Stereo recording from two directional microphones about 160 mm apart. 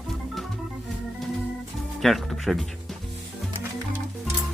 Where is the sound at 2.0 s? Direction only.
Centre (ahead or behind).